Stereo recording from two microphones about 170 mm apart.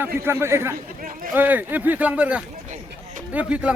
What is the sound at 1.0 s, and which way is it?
Speech, 55° right (ahead or behind).